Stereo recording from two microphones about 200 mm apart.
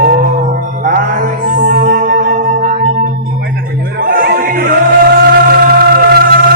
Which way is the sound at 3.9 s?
45° right (ahead or behind).